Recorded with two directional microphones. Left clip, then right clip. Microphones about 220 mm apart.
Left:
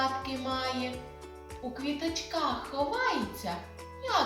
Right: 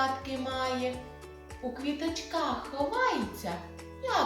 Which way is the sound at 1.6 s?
5° left (ahead or behind).